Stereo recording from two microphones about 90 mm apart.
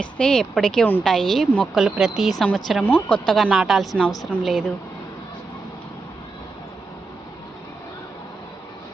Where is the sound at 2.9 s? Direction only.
15° left (ahead or behind).